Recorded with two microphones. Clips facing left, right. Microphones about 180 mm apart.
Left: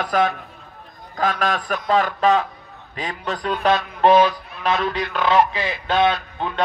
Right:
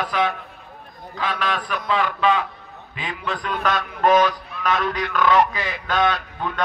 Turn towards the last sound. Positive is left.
turn(degrees=25)  # may be behind; listen again after turning